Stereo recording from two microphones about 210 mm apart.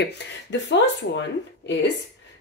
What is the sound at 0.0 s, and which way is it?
Speech, 55° left (ahead or behind).